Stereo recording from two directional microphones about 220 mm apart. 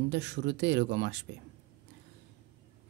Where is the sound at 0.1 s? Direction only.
50° right (ahead or behind).